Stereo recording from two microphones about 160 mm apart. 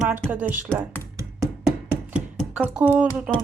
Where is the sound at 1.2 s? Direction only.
20° right (ahead or behind).